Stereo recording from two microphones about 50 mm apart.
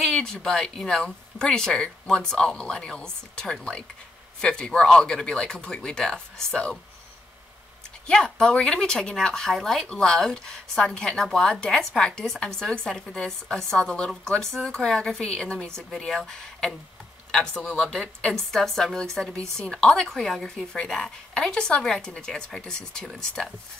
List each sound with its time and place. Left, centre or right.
0.0 s speech: centre
8.1 s speech: centre
20.2 s speech: centre